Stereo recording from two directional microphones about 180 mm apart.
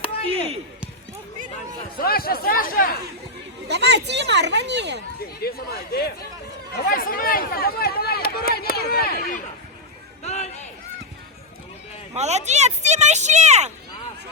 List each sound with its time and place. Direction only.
2.0 s speech: 55° left (ahead or behind)
3.7 s speech: 70° right (ahead or behind)
5.2 s speech: 60° left (ahead or behind)
10.2 s a sound: 40° left (ahead or behind)
12.1 s speech: 40° right (ahead or behind)